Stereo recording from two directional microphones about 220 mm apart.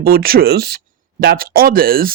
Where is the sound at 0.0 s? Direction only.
45° right (ahead or behind).